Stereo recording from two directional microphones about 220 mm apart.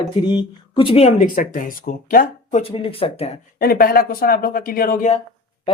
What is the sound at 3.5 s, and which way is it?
Speech, 45° left (ahead or behind).